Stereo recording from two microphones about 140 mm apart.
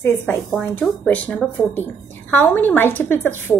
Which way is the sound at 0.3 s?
Centre (ahead or behind).